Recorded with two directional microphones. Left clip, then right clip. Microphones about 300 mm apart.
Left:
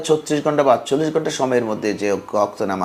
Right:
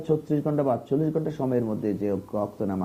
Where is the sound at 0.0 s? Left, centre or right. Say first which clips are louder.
Left 8 dB; centre.